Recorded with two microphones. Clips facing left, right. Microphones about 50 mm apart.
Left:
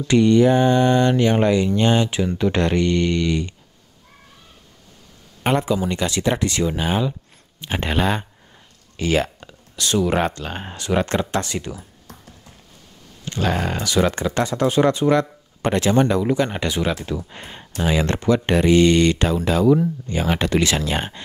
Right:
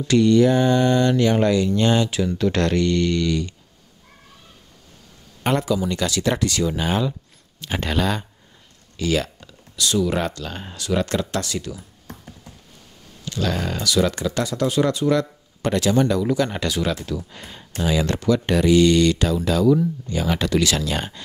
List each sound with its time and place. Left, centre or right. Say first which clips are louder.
0.1 s mantra: left 1 dB; left
5.4 s mantra: left 1 dB; left
8.9 s speech: left 2 dB; left
13.2 s speech: left 2 dB; left